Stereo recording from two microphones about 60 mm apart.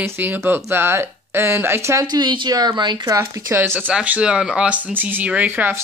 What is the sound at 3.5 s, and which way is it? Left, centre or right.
Speech, right.